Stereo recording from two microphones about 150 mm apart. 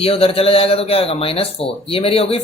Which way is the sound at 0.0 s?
40° left (ahead or behind).